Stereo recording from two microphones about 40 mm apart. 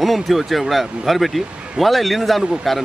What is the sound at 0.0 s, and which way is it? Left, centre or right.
Speech, centre.